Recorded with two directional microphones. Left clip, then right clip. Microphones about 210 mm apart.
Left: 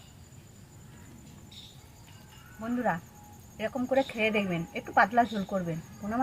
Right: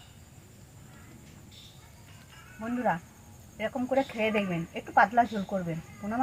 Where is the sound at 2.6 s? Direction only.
20° left (ahead or behind).